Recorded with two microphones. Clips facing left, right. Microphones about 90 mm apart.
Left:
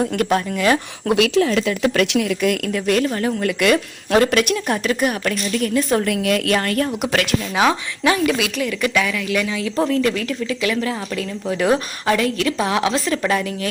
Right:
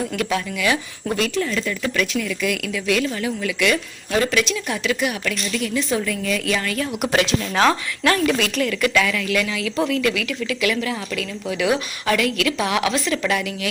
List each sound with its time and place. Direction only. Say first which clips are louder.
0.0 s speech: left 4 dB; 50° left (ahead or behind)
1.0 s speech: left 7 dB; 85° left; by 6.9 s 55° left (ahead or behind)
7.5 s a woman's voice: even; 10° left (ahead or behind); by 13.7 s 30° left (ahead or behind)